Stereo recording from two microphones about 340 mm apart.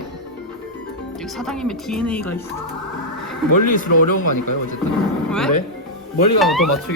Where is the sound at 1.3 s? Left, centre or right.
Centre.